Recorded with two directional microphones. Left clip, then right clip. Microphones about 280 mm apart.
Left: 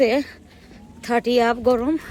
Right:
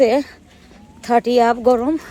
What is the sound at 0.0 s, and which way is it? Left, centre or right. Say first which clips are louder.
Speech: right 4 dB; centre.